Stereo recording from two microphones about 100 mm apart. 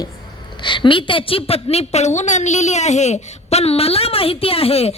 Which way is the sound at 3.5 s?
90° left.